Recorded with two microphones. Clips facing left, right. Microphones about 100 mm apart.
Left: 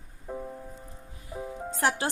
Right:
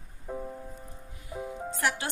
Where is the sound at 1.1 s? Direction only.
30° left (ahead or behind).